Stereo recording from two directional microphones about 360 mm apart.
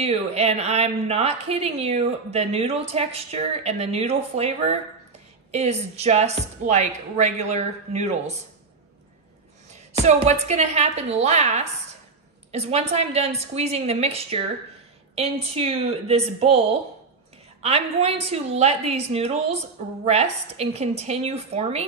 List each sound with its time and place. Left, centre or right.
0.0 s a woman's voice: centre
9.9 s a woman's voice: centre
17.6 s a woman's voice: centre